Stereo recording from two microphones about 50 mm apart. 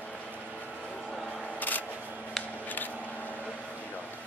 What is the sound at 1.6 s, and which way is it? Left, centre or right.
Camera, left.